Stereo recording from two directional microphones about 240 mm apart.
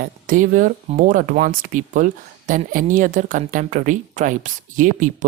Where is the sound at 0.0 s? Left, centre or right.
Right.